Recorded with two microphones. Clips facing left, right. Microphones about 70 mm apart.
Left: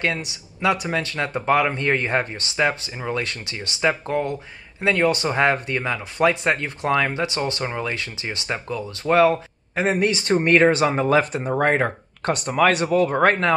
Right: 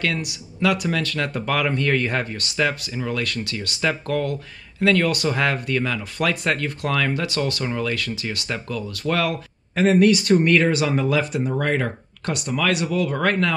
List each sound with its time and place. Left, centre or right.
0.0 s speech: left